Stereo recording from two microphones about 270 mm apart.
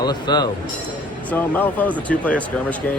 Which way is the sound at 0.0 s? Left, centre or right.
Centre.